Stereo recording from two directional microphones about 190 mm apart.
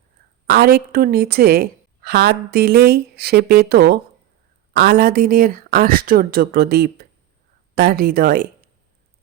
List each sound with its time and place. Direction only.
0.4 s a woman's voice: 55° right (ahead or behind)